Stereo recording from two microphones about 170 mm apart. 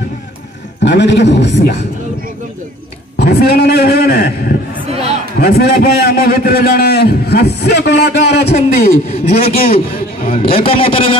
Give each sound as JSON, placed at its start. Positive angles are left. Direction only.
{"t": 0.8, "sound": "a man's voice", "side_deg": 90}
{"t": 3.2, "sound": "a man's voice", "side_deg": 75}
{"t": 9.1, "sound": "a man's voice", "side_deg": 40}